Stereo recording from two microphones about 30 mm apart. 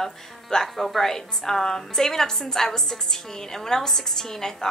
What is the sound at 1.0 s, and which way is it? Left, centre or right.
A woman's voice, centre.